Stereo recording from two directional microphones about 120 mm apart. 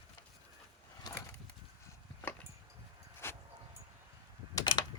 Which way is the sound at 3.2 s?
20° left (ahead or behind).